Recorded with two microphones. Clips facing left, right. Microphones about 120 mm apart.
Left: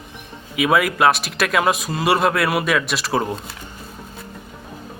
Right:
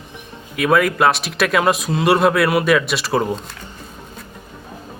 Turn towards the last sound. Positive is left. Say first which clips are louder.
# right 2 dB
turn(degrees=0)  # may be behind; listen again after turning